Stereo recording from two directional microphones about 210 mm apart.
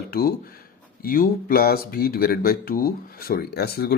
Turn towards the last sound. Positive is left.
turn(degrees=45)  # may be behind; listen again after turning